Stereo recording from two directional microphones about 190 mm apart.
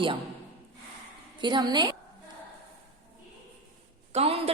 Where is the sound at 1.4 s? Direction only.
25° right (ahead or behind).